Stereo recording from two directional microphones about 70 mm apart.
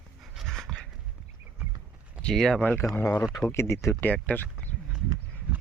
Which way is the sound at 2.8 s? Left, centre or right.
Left.